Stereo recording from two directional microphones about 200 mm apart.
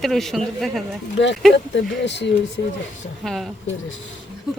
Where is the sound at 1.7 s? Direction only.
60° left (ahead or behind).